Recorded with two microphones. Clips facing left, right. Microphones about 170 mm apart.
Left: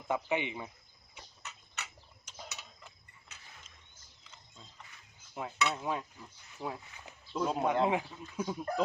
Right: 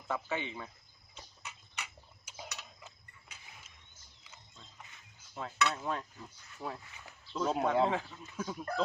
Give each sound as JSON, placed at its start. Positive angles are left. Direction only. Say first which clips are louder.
{"t": 0.1, "sound": "speech", "louder": "left 4 dB", "side_deg": 15}
{"t": 1.4, "sound": "tick-tock", "louder": "even", "side_deg": -10}
{"t": 2.8, "sound": "a sound", "louder": "right 1 dB", "side_deg": -10}
{"t": 5.3, "sound": "speech", "louder": "even", "side_deg": 15}
{"t": 7.1, "sound": "a sound", "louder": "left 3 dB", "side_deg": 20}
{"t": 7.5, "sound": "speech", "louder": "even", "side_deg": 10}